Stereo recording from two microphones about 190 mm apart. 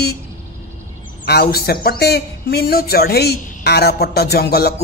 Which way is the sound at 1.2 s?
55° left (ahead or behind).